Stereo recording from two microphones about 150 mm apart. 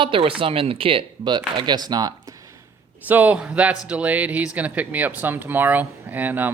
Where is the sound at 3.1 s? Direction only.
10° right (ahead or behind).